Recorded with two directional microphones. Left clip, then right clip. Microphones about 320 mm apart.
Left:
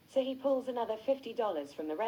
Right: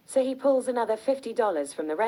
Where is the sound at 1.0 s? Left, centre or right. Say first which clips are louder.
Right 6 dB; right.